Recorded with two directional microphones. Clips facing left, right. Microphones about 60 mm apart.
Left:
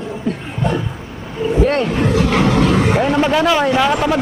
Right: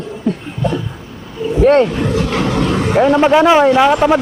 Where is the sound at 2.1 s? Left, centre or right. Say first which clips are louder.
Left 2 dB; centre.